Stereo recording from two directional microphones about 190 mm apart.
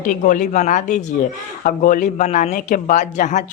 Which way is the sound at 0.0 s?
45° left (ahead or behind).